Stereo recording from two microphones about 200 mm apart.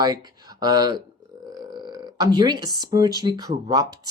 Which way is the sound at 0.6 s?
20° right (ahead or behind).